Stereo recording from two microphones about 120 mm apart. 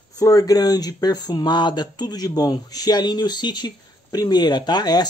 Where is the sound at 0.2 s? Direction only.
30° left (ahead or behind).